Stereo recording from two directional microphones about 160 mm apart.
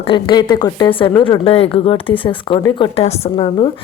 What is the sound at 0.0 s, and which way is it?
A woman's voice, 30° left (ahead or behind).